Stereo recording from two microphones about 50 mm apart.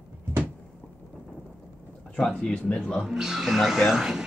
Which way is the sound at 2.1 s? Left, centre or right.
Centre.